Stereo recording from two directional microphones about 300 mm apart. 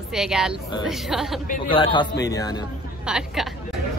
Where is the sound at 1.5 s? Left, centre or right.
Centre.